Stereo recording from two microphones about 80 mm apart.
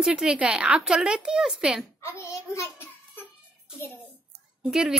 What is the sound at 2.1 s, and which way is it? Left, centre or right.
A child's voice, left.